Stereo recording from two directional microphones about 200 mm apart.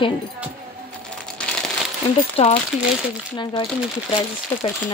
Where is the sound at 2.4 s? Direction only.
30° left (ahead or behind).